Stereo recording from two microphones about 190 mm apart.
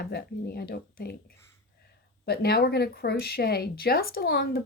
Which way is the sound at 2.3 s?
55° left (ahead or behind).